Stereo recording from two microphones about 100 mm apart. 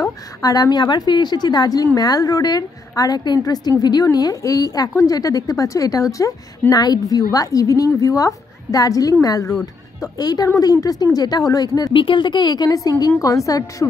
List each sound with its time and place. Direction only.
0.4 s a woman's voice: 40° left (ahead or behind)
9.5 s a woman's voice: 5° left (ahead or behind)
10.1 s a woman's voice: 40° left (ahead or behind)
11.9 s a woman's voice: 60° left (ahead or behind); by 13.8 s 35° left (ahead or behind)